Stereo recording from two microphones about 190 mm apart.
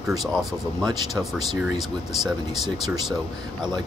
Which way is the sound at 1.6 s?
5° right (ahead or behind).